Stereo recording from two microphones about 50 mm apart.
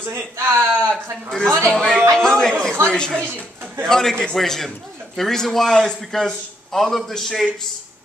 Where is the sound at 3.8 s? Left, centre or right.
Centre.